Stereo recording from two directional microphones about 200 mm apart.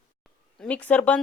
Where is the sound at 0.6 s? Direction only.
5° left (ahead or behind).